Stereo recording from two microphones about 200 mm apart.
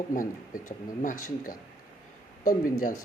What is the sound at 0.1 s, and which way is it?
Speech, 40° left (ahead or behind).